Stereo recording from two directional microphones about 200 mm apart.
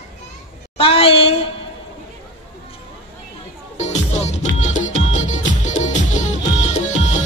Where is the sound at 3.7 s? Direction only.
35° left (ahead or behind).